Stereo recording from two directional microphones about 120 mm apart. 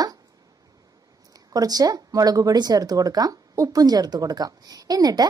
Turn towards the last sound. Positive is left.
turn(degrees=-30)  # may be behind; listen again after turning